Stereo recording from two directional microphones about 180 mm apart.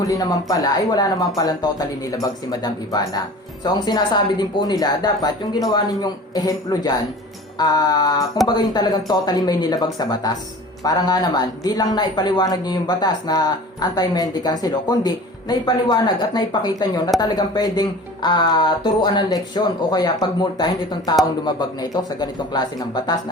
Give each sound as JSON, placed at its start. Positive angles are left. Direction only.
{"t": 0.1, "sound": "speech", "side_deg": 20}